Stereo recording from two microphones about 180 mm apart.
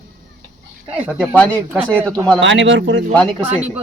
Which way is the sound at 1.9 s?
15° right (ahead or behind).